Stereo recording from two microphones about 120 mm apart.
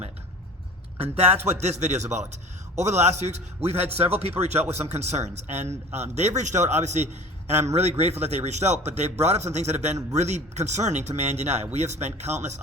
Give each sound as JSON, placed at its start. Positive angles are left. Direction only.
{"t": 1.0, "sound": "a man's voice", "side_deg": -60}